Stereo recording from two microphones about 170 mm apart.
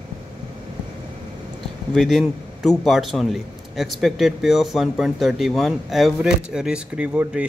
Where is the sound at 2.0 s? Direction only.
Centre (ahead or behind).